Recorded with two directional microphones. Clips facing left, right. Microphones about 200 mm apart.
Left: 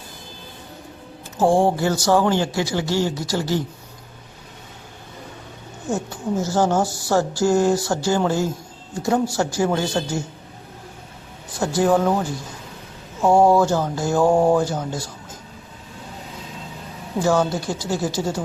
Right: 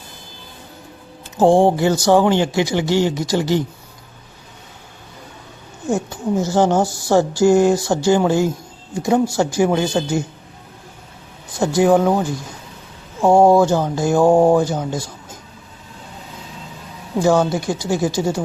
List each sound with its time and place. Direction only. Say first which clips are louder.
1.4 s speech: right 4 dB; 20° right (ahead or behind)
5.9 s speech: right 4 dB; 15° right (ahead or behind)
11.6 s speech: right 4 dB; 15° right (ahead or behind)
13.2 s speech: right 3 dB; 15° right (ahead or behind)
17.2 s speech: right 4 dB; 15° right (ahead or behind)